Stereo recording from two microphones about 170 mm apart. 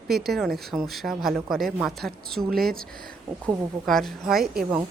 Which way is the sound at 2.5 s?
65° right (ahead or behind).